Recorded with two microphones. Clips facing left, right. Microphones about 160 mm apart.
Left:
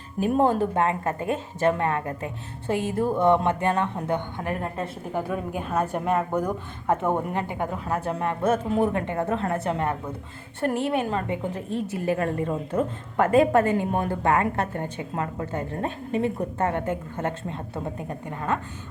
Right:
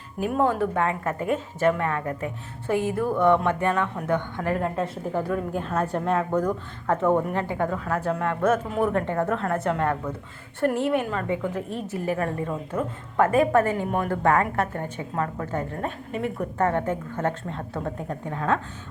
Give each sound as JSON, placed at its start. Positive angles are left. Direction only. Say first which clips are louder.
{"t": 0.2, "sound": "a woman's voice", "louder": "left 2 dB", "side_deg": 30}